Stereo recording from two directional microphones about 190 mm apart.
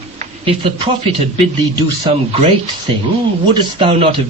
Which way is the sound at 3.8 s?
25° right (ahead or behind).